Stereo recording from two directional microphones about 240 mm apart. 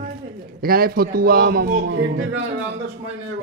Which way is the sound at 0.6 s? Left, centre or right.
Right.